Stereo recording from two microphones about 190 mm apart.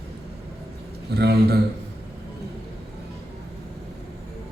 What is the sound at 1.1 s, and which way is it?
Speech, 55° right (ahead or behind).